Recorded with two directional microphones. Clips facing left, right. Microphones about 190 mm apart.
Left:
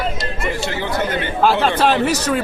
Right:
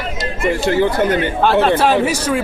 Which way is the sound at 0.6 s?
50° right (ahead or behind).